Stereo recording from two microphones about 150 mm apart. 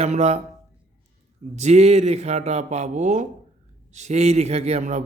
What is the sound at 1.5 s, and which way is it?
Speech, 50° right (ahead or behind).